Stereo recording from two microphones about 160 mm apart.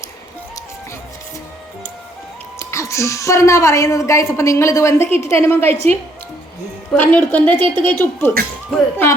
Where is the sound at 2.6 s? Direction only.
20° left (ahead or behind).